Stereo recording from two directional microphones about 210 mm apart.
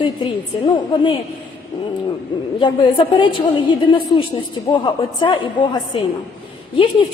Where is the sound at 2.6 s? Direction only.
20° left (ahead or behind).